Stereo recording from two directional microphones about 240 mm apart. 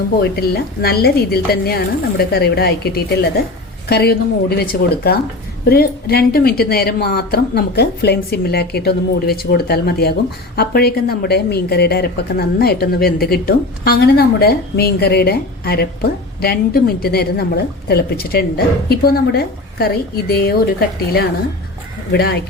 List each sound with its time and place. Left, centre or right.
0.2 s a woman's voice: left